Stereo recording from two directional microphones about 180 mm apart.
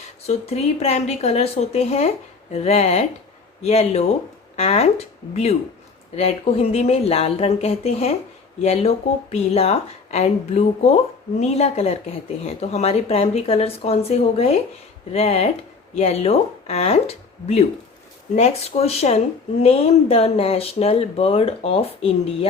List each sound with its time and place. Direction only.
0.3 s speech: 35° left (ahead or behind)